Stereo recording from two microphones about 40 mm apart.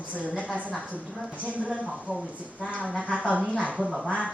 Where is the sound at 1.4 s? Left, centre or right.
Right.